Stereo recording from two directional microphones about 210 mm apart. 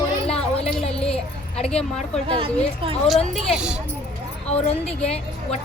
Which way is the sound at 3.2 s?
30° left (ahead or behind).